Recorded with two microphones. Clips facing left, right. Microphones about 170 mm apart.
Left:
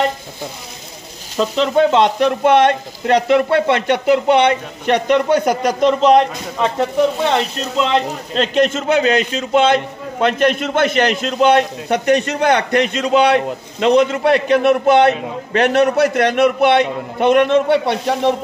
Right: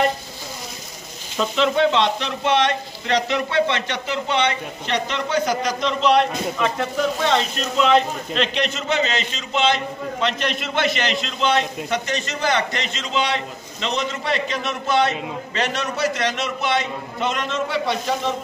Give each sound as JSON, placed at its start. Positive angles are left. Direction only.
{"t": 1.4, "sound": "speech", "side_deg": 40}
{"t": 6.6, "sound": "speech", "side_deg": 30}
{"t": 8.4, "sound": "a man's voice", "side_deg": 45}